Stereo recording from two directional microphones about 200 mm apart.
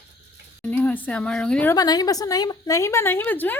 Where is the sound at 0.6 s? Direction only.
10° left (ahead or behind).